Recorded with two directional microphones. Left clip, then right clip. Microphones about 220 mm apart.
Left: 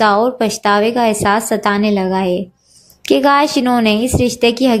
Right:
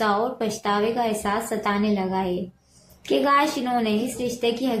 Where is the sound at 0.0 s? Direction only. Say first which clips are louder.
Left 10 dB; 40° left (ahead or behind).